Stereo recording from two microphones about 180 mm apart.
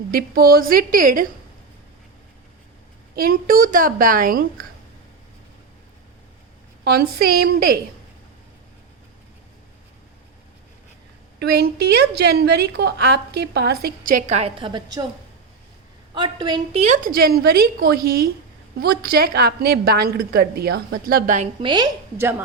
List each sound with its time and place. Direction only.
0.1 s a woman's voice: 55° right (ahead or behind)
3.2 s a woman's voice: 55° right (ahead or behind)
6.8 s a woman's voice: 60° right (ahead or behind)
11.3 s a woman's voice: 65° right (ahead or behind); by 15.0 s 25° right (ahead or behind)
16.1 s a woman's voice: 25° right (ahead or behind)
16.8 s a woman's voice: 45° right (ahead or behind)
21.6 s a woman's voice: 25° right (ahead or behind)